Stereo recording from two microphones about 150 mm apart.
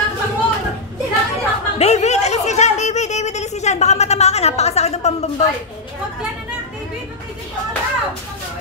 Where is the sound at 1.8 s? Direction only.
50° left (ahead or behind).